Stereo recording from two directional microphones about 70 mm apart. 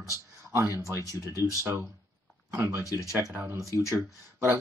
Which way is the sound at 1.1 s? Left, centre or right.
Left.